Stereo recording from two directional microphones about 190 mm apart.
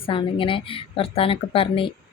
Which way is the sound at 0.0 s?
25° left (ahead or behind).